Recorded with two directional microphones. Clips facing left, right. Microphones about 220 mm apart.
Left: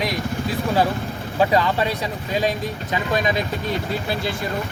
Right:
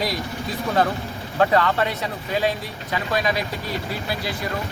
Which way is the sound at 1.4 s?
15° left (ahead or behind).